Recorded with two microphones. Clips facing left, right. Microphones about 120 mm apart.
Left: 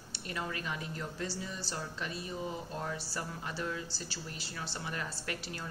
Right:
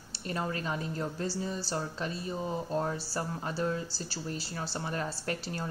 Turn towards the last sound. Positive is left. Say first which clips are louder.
# right 6 dB
turn(degrees=-35)  # may be behind; listen again after turning